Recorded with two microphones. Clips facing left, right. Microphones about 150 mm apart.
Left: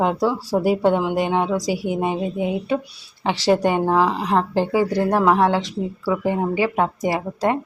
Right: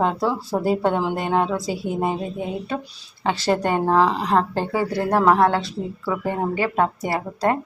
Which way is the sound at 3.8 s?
10° left (ahead or behind).